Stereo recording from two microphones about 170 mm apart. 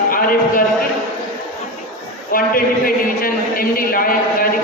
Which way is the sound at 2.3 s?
55° left (ahead or behind).